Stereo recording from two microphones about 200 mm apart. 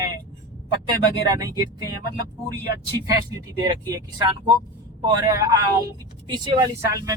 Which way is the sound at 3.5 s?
15° right (ahead or behind).